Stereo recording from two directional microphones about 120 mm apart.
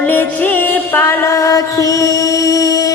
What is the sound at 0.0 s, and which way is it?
Music, 15° left (ahead or behind).